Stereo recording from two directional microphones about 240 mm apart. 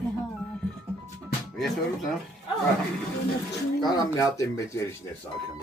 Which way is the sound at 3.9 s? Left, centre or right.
Centre.